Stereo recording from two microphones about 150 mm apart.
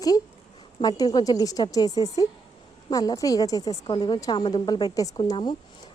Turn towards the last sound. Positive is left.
turn(degrees=30)  # may be behind; listen again after turning